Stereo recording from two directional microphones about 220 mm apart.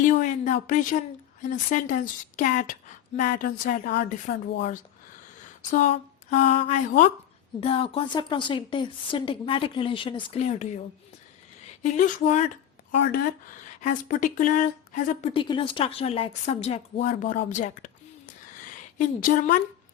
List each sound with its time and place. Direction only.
0.0 s a sound: 35° left (ahead or behind)
1.4 s speech: 35° left (ahead or behind)
5.4 s a sound: 35° left (ahead or behind)
6.3 s a woman's voice: 30° left (ahead or behind)
11.8 s speech: 35° left (ahead or behind)
12.9 s speech: 50° left (ahead or behind)
14.1 s speech: 40° left (ahead or behind)
15.3 s a woman's voice: 20° left (ahead or behind)
18.9 s speech: 40° left (ahead or behind)